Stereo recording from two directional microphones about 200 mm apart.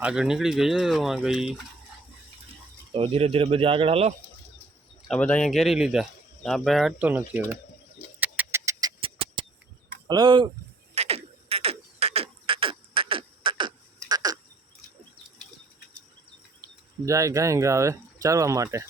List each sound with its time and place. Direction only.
0.0 s speech: 5° right (ahead or behind)
2.9 s speech: 30° right (ahead or behind)
5.0 s speech: 5° left (ahead or behind)
8.2 s bird: 10° right (ahead or behind)
9.0 s a sound: 25° right (ahead or behind)
10.1 s speech: 20° right (ahead or behind)
10.9 s frog: 30° right (ahead or behind)
14.1 s a sound: 20° right (ahead or behind)
17.1 s speech: 15° right (ahead or behind)